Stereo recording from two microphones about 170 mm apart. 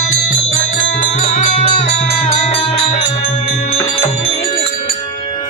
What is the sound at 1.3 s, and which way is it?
Music, 35° left (ahead or behind).